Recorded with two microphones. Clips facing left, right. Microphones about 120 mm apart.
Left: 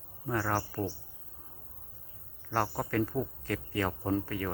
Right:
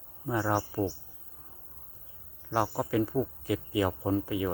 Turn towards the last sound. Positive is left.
turn(degrees=-10)  # may be behind; listen again after turning